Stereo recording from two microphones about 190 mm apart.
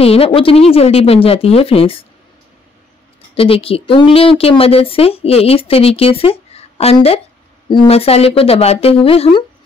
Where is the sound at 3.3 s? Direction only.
30° left (ahead or behind).